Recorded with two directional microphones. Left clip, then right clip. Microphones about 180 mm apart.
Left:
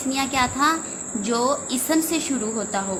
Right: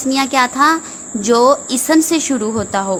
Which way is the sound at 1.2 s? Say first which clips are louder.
Right 11 dB; 55° right (ahead or behind).